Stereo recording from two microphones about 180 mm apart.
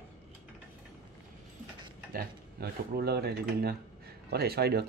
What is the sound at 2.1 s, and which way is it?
Speech, 55° right (ahead or behind).